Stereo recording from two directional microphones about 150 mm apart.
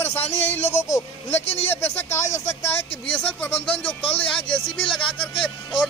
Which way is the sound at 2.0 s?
15° left (ahead or behind).